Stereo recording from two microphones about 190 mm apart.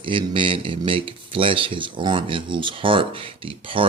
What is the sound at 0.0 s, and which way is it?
Speech, 25° right (ahead or behind).